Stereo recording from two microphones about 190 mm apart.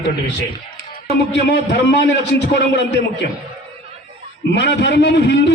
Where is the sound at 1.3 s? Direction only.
65° left (ahead or behind).